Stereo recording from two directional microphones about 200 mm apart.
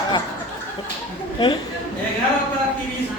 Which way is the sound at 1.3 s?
25° left (ahead or behind).